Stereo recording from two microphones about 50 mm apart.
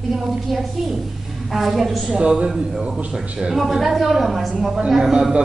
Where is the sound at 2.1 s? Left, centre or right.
Centre.